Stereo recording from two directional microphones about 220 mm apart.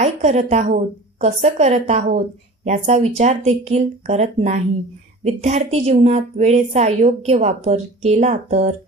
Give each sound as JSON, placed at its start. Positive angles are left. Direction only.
{"t": 0.0, "sound": "a woman's voice", "side_deg": -30}